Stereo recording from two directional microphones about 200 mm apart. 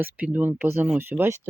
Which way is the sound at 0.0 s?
5° right (ahead or behind).